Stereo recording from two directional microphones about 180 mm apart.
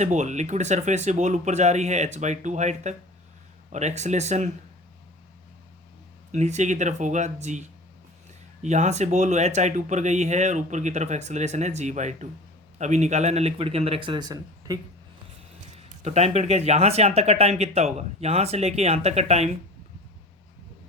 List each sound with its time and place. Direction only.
0.0 s speech: 40° right (ahead or behind)
6.3 s speech: 40° right (ahead or behind)
8.6 s speech: 40° right (ahead or behind); by 14.8 s 20° right (ahead or behind)
16.0 s speech: 35° right (ahead or behind)